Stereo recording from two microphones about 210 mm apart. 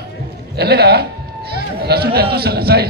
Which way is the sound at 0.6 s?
50° right (ahead or behind).